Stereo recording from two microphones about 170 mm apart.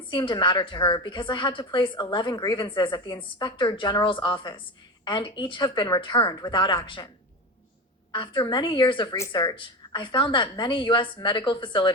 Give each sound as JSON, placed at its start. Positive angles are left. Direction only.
{"t": 0.1, "sound": "a woman's voice", "side_deg": 25}
{"t": 8.1, "sound": "a woman's voice", "side_deg": 30}